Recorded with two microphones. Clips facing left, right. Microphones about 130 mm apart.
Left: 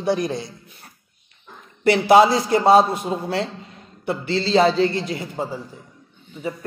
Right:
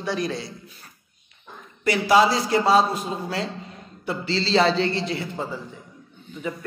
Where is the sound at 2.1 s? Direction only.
55° left (ahead or behind).